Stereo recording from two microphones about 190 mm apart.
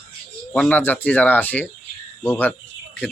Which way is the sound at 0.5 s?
10° left (ahead or behind).